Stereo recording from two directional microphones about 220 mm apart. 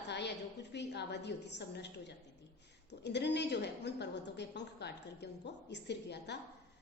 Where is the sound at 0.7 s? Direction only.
50° left (ahead or behind).